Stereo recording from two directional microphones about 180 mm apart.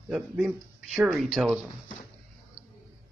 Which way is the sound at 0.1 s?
5° right (ahead or behind).